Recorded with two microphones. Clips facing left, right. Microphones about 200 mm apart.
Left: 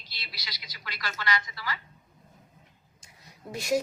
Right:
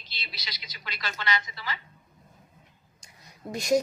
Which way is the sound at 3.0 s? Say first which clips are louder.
Right 4 dB; 5° left (ahead or behind).